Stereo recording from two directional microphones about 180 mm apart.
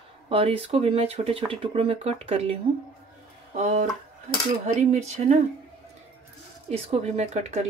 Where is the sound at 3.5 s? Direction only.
40° right (ahead or behind).